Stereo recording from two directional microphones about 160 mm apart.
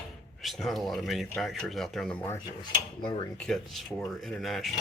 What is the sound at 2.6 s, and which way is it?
Speech, 25° left (ahead or behind).